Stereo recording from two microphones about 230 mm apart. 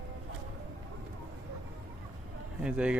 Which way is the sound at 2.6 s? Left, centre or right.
Centre.